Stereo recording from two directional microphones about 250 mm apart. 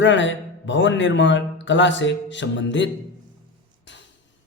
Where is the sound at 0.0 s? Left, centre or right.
Left.